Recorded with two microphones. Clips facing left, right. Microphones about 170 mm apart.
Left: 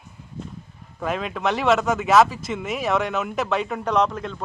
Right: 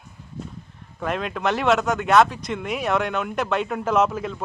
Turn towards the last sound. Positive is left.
turn(degrees=-5)  # may be behind; listen again after turning